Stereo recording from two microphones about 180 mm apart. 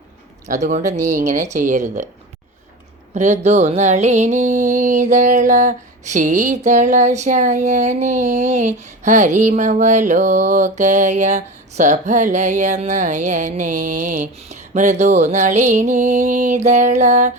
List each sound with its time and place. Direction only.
0.4 s music: 40° right (ahead or behind)
3.2 s music: 40° right (ahead or behind)